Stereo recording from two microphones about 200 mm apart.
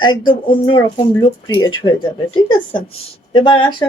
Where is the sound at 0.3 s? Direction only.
25° left (ahead or behind).